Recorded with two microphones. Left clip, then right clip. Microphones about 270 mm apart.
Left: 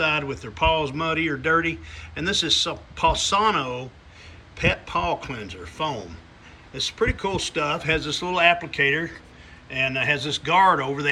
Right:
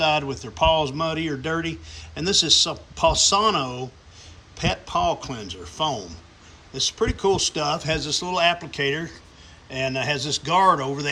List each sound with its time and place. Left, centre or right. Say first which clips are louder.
0.0 s speech: right 2 dB; centre